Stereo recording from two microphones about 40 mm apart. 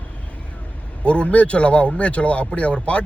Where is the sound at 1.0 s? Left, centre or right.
Left.